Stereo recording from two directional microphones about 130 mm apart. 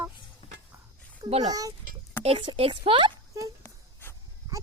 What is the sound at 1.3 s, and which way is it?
Speech, 60° right (ahead or behind).